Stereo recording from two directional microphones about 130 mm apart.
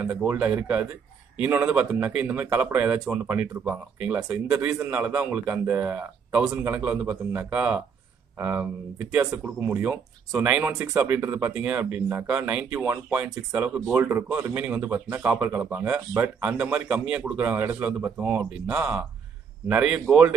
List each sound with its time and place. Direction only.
0.1 s speech: 10° right (ahead or behind)